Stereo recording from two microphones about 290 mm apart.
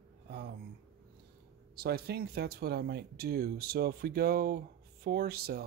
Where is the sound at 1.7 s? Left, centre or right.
Right.